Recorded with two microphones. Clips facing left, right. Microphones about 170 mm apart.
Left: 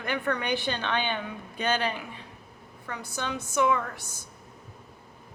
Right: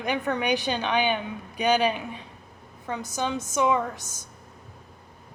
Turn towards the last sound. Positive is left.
turn(degrees=-20)  # may be behind; listen again after turning